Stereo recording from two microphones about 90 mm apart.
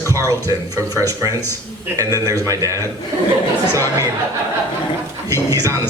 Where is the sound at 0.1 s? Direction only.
35° right (ahead or behind).